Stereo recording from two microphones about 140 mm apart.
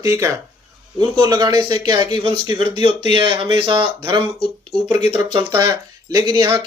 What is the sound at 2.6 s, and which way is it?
Speech, 45° left (ahead or behind).